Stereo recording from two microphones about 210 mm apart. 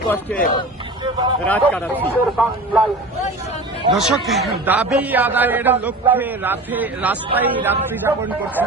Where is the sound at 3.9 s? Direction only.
Centre (ahead or behind).